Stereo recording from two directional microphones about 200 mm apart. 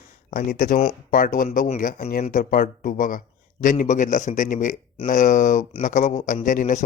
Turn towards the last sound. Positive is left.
turn(degrees=40)  # may be behind; listen again after turning